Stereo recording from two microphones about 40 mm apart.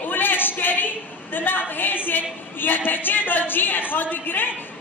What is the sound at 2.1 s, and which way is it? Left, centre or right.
A woman's voice, left.